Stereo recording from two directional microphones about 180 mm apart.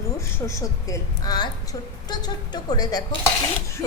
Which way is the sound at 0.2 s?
15° left (ahead or behind).